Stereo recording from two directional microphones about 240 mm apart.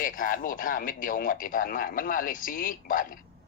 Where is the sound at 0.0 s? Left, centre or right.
Left.